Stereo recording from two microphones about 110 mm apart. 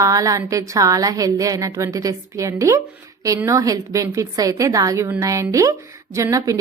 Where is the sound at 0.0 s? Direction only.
30° right (ahead or behind).